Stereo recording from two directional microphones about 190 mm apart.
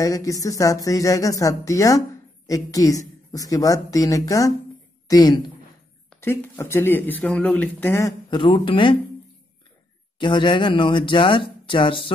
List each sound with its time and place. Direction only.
0.0 s speech: 15° left (ahead or behind)
10.1 s speech: 25° left (ahead or behind)